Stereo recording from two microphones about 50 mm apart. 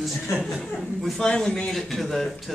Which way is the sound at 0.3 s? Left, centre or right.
Left.